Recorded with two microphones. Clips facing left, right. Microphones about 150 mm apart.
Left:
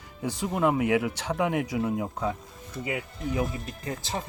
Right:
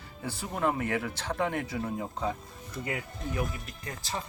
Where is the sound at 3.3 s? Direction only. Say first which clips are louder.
Left 5 dB; 25° left (ahead or behind).